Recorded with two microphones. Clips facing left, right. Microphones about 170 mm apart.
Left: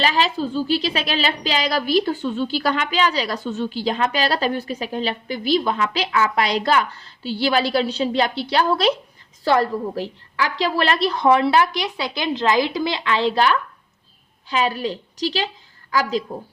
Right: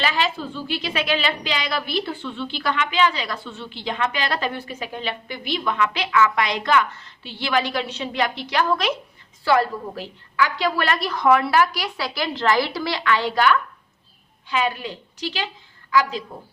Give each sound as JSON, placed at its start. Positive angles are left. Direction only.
{"t": 0.0, "sound": "a woman's voice", "side_deg": 35}